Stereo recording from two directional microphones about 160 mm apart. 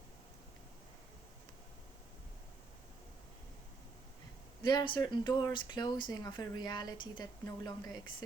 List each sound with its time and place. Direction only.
4.6 s speech: 25° left (ahead or behind)